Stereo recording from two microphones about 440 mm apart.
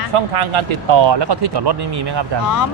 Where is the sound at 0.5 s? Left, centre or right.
Right.